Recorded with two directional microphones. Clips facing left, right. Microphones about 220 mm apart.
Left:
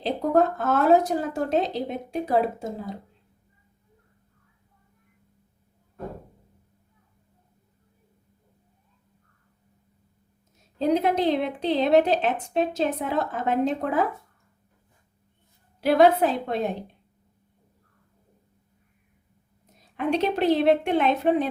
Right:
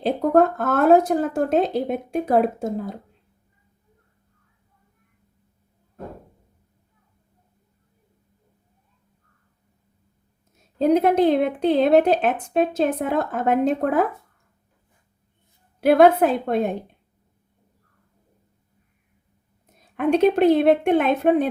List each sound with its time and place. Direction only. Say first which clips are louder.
0.0 s speech: right 4 dB; 55° right (ahead or behind)
10.8 s speech: right 5 dB; 55° right (ahead or behind)
15.8 s speech: right 4 dB; 55° right (ahead or behind)
20.0 s speech: right 7 dB; 50° right (ahead or behind)